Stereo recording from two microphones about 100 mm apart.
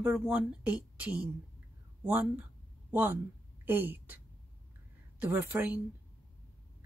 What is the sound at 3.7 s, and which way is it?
A woman's voice, 20° right (ahead or behind).